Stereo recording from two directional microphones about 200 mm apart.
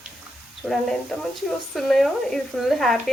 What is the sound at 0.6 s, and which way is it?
A woman's voice, centre (ahead or behind).